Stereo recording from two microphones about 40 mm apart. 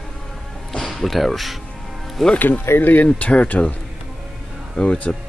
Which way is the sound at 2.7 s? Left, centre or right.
Left.